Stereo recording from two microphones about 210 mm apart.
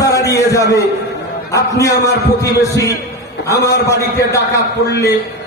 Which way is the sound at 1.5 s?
15° left (ahead or behind).